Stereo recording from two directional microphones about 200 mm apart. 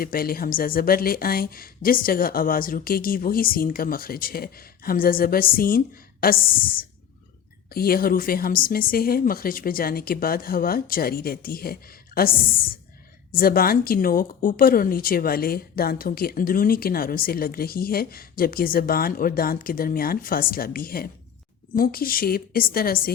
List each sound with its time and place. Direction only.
0.0 s a woman's voice: 45° left (ahead or behind)